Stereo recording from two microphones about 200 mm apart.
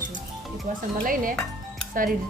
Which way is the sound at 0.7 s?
40° right (ahead or behind).